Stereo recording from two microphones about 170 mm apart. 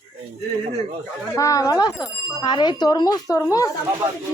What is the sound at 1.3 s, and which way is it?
A woman's voice, 20° left (ahead or behind).